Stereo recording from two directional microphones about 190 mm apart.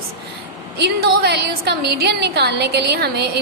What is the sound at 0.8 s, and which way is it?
A woman's voice, 60° right (ahead or behind).